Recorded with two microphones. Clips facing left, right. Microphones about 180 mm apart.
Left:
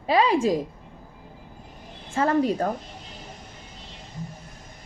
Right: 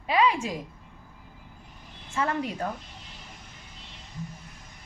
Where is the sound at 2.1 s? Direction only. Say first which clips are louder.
Left 7 dB; 35° left (ahead or behind).